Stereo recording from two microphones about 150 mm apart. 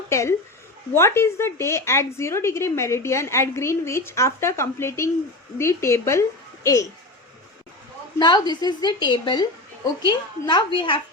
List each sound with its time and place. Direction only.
0.1 s a woman's voice: 20° left (ahead or behind)
8.2 s a woman's voice: 30° left (ahead or behind)